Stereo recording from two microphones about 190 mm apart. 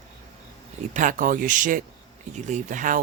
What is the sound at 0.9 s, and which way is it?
Speech, 45° right (ahead or behind).